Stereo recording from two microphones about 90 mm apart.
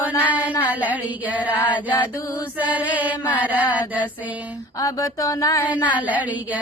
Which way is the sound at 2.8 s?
15° right (ahead or behind).